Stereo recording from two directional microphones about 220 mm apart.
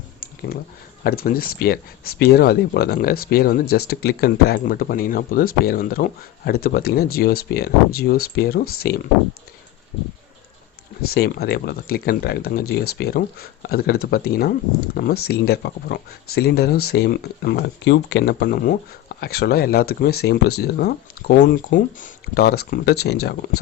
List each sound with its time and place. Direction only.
0.2 s a sound: 45° left (ahead or behind)
1.0 s speech: 40° left (ahead or behind)
11.1 s speech: 45° left (ahead or behind)